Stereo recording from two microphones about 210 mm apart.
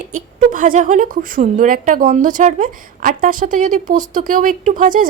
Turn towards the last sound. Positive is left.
turn(degrees=-40)  # may be behind; listen again after turning